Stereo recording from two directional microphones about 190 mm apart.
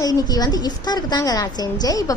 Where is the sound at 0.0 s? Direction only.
20° left (ahead or behind).